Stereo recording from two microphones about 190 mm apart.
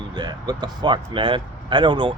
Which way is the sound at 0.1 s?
20° right (ahead or behind).